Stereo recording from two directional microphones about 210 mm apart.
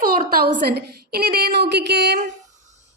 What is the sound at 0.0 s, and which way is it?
A woman's voice, 45° right (ahead or behind).